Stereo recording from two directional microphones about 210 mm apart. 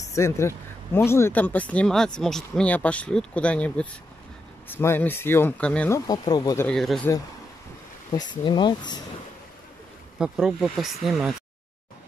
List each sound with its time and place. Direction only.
0.0 s speech: 15° left (ahead or behind)
6.7 s speech: centre (ahead or behind)
8.1 s speech: 20° left (ahead or behind)
10.1 s speech: 5° right (ahead or behind)